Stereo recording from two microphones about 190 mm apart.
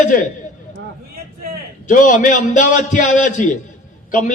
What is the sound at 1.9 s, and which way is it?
A man's voice, 45° left (ahead or behind).